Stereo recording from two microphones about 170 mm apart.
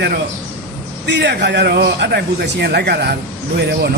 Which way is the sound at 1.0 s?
90° right.